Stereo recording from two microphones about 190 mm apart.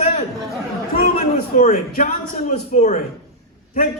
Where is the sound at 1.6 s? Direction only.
40° left (ahead or behind).